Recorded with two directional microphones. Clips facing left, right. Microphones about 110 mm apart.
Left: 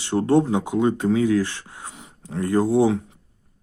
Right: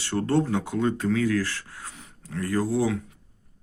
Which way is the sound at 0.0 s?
20° left (ahead or behind).